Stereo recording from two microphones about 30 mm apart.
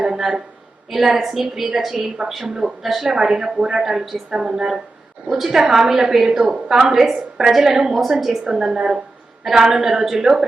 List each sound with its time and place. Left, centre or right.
0.1 s a sound: centre
0.9 s a woman's voice: centre
2.5 s a woman's voice: centre
3.3 s a woman's voice: right
3.8 s a woman's voice: centre
4.3 s a woman's voice: right